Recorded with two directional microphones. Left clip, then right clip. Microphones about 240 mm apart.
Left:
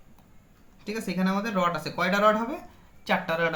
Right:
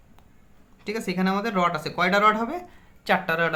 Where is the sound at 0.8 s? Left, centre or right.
Right.